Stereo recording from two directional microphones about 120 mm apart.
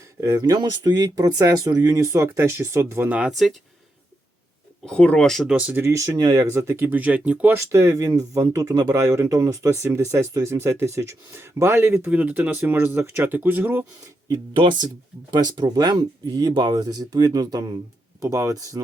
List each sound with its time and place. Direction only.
0.2 s speech: 25° right (ahead or behind); by 3.5 s 5° right (ahead or behind)
4.9 s speech: 10° left (ahead or behind)
5.5 s speech: 10° right (ahead or behind)
14.3 s speech: 45° right (ahead or behind); by 18.8 s 30° right (ahead or behind)